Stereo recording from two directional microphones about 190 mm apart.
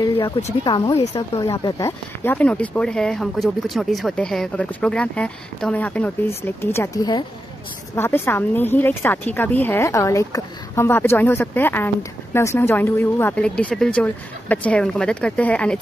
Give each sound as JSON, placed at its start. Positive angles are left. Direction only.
{"t": 0.7, "sound": "speech", "side_deg": 25}